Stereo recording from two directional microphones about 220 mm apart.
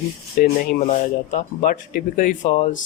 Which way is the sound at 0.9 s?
35° left (ahead or behind).